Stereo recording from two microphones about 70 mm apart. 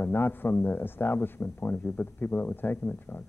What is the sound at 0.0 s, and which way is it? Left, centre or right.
Speech, left.